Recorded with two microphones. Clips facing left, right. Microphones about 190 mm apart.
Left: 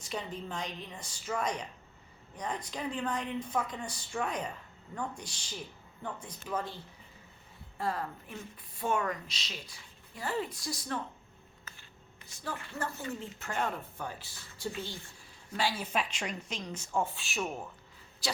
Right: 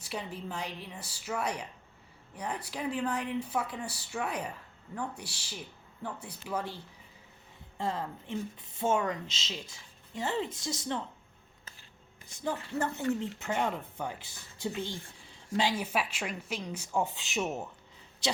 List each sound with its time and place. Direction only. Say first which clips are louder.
0.0 s speech: even; 10° right (ahead or behind)
7.8 s speech: right 1 dB; 20° right (ahead or behind)
12.4 s speech: right 6 dB; 20° right (ahead or behind)